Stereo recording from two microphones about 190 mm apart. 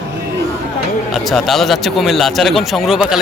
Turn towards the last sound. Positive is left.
turn(degrees=0)  # may be behind; listen again after turning